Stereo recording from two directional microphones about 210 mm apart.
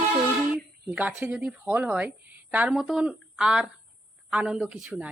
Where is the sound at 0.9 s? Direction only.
10° right (ahead or behind).